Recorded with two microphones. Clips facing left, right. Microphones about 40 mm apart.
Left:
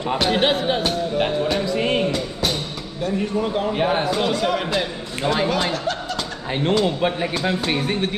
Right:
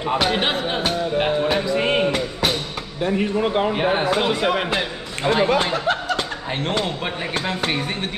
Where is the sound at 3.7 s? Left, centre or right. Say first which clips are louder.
Right 1 dB; centre.